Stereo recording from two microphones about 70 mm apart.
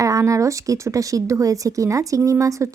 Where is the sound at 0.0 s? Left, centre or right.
Right.